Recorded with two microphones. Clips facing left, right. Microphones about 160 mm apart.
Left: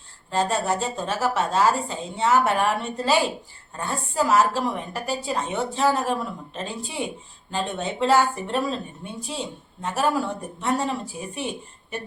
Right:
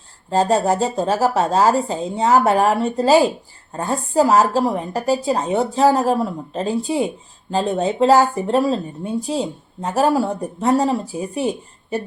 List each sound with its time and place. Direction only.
0.3 s speech: 35° right (ahead or behind)